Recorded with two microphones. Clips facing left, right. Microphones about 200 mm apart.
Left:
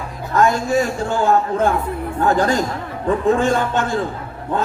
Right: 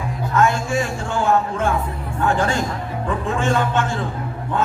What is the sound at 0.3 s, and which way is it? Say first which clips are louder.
Speech: left 3 dB; 35° left (ahead or behind).